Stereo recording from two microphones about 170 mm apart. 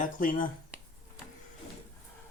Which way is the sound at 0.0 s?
55° left (ahead or behind).